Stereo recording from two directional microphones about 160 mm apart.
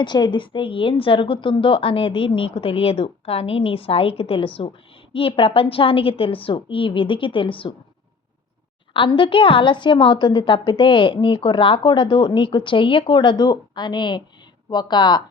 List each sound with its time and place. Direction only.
0.0 s a woman's voice: 30° left (ahead or behind)
8.9 s a woman's voice: 30° left (ahead or behind)